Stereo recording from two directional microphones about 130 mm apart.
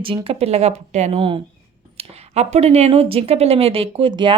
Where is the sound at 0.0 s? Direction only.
45° right (ahead or behind).